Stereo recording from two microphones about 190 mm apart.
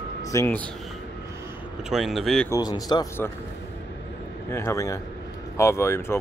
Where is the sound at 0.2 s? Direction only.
15° left (ahead or behind).